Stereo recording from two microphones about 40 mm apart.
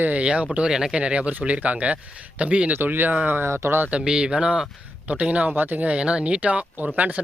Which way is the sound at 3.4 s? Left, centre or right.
Right.